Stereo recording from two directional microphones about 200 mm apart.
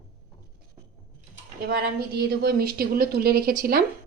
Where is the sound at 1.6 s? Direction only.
55° right (ahead or behind).